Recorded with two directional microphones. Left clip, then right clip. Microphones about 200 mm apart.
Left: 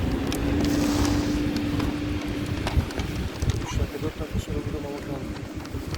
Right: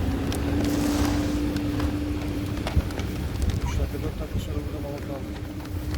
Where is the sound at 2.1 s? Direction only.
45° right (ahead or behind).